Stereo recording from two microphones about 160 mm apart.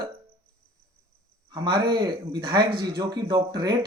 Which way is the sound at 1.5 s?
30° right (ahead or behind).